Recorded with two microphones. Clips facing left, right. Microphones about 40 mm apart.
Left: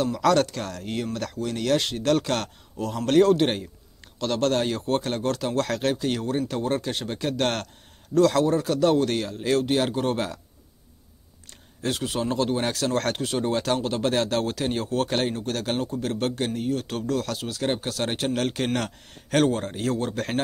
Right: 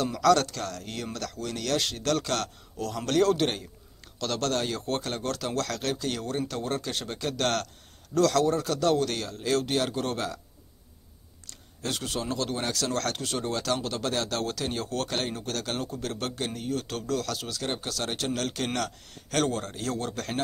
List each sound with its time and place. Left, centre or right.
0.2 s speech: centre
11.8 s a man's voice: centre
17.8 s a man's voice: left